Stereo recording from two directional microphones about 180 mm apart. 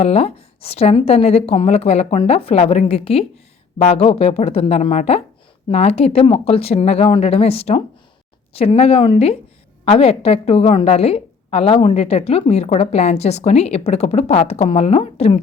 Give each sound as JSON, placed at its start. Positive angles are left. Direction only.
{"t": 0.0, "sound": "a woman's voice", "side_deg": 35}